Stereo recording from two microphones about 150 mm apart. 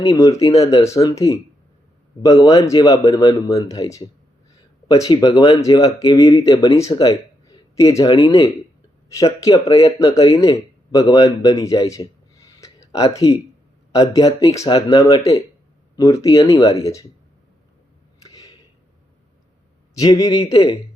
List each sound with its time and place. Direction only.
0.1 s speech: 20° left (ahead or behind)
9.7 s speech: 25° left (ahead or behind)
18.2 s a sound: 25° left (ahead or behind)
20.0 s speech: 25° left (ahead or behind)